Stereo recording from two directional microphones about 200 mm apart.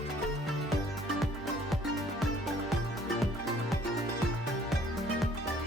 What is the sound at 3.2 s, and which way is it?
Music, centre (ahead or behind).